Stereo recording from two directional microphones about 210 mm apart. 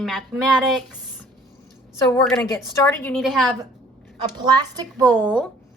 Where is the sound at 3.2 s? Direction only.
Centre (ahead or behind).